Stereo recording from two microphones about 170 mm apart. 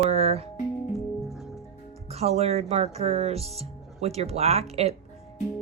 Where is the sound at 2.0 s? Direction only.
40° right (ahead or behind).